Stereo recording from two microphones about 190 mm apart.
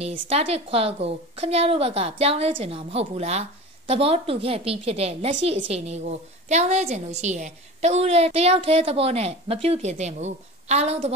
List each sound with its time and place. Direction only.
0.3 s a woman's voice: 30° right (ahead or behind)